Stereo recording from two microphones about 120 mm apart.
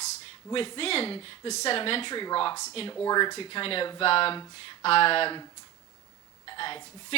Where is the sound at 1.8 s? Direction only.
50° left (ahead or behind).